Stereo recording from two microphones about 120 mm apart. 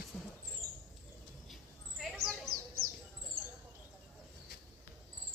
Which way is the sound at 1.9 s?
Centre (ahead or behind).